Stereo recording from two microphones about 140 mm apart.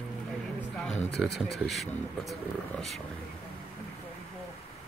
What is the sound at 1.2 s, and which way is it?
Speech, 5° right (ahead or behind).